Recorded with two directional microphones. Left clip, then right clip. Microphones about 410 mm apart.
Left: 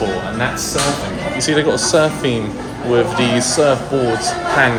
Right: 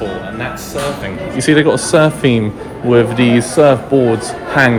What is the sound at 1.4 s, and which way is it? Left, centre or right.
Speech, centre.